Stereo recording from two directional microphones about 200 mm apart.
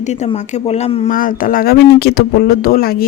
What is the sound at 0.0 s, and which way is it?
Speech, 35° left (ahead or behind).